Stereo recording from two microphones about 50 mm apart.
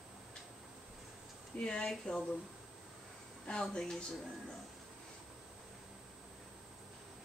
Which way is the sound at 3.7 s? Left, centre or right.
Centre.